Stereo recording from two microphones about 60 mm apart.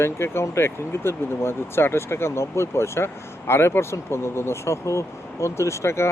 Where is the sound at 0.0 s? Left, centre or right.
Left.